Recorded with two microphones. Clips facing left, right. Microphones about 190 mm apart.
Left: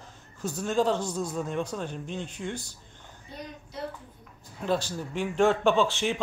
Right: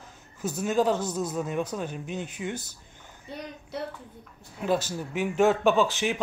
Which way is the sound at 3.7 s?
65° right (ahead or behind).